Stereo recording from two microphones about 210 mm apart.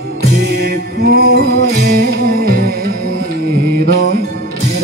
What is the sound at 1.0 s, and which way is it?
Music, 45° right (ahead or behind).